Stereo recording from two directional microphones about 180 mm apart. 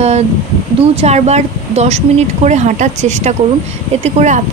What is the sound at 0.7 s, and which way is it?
Speech, 35° right (ahead or behind).